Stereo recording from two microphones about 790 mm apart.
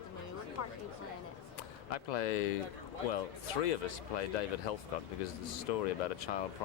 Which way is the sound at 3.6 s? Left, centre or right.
Left.